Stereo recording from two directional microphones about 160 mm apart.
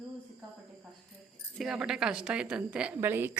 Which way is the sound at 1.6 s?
Centre (ahead or behind).